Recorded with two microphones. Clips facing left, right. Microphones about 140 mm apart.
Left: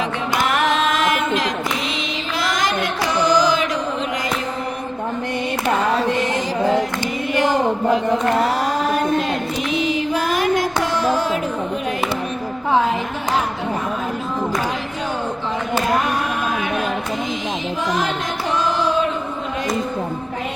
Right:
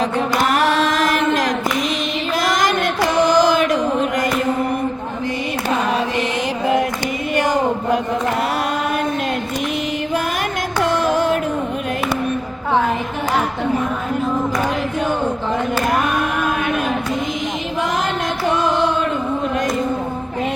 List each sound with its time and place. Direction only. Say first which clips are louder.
0.5 s music: right 2 dB; 35° right (ahead or behind)
2.4 s music: right 2 dB; 45° right (ahead or behind)